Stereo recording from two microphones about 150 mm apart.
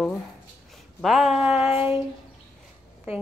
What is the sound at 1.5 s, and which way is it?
Child singing, 40° left (ahead or behind).